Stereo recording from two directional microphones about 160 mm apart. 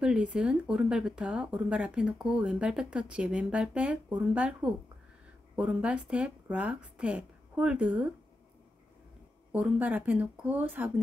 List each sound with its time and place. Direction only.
0.0 s speech: 5° right (ahead or behind)
9.5 s speech: 10° right (ahead or behind)